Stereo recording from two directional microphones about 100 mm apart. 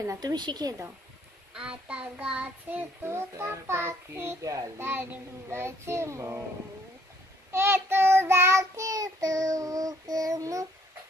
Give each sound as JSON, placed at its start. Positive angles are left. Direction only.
{"t": 0.0, "sound": "child singing", "side_deg": -30}
{"t": 0.3, "sound": "a woman's voice", "side_deg": -45}
{"t": 1.5, "sound": "a child's voice", "side_deg": -10}
{"t": 3.1, "sound": "child singing", "side_deg": -25}
{"t": 4.4, "sound": "child singing", "side_deg": -35}
{"t": 4.8, "sound": "child singing", "side_deg": -20}
{"t": 7.5, "sound": "child singing", "side_deg": -25}